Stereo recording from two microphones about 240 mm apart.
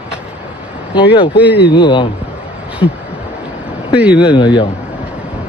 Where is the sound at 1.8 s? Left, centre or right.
Centre.